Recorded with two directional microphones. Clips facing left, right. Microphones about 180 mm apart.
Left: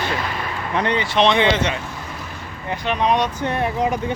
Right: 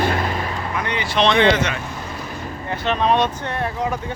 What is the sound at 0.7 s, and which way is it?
Speech, 25° left (ahead or behind).